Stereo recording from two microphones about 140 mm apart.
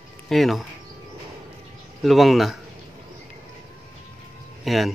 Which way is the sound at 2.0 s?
Centre (ahead or behind).